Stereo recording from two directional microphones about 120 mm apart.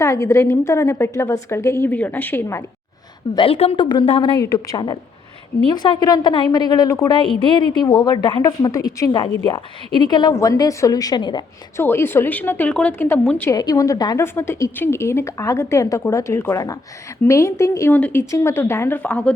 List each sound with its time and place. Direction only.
0.0 s a woman's voice: 25° left (ahead or behind)
3.3 s a woman's voice: 50° left (ahead or behind)
4.4 s a woman's voice: 30° left (ahead or behind)
7.3 s a woman's voice: 40° left (ahead or behind)
10.3 s a woman's voice: 25° left (ahead or behind)
11.8 s a woman's voice: 20° left (ahead or behind)
13.5 s a woman's voice: 30° left (ahead or behind)
14.2 s a woman's voice: 20° left (ahead or behind)